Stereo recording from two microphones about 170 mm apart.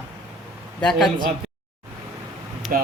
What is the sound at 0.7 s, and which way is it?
Speech, 5° left (ahead or behind).